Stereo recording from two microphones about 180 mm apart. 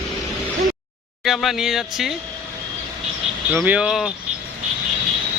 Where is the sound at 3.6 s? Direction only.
5° right (ahead or behind).